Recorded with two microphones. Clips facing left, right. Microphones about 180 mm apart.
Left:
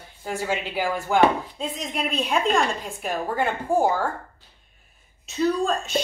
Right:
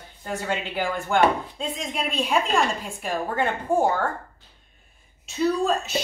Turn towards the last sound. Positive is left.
turn(degrees=-5)  # may be behind; listen again after turning